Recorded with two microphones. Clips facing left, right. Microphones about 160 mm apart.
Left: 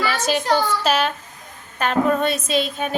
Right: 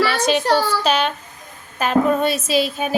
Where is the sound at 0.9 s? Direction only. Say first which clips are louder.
Right 1 dB; 5° left (ahead or behind).